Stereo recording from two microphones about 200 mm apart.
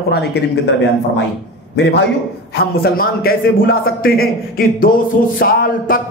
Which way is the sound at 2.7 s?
50° left (ahead or behind).